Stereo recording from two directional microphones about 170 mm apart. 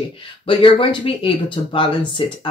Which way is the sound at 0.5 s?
30° left (ahead or behind).